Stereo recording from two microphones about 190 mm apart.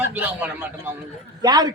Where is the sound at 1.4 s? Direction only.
20° right (ahead or behind).